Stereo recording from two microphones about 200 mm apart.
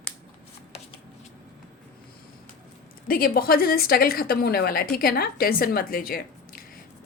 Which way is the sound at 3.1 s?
45° left (ahead or behind).